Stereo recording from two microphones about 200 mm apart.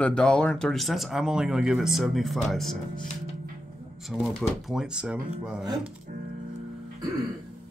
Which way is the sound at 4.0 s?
Centre (ahead or behind).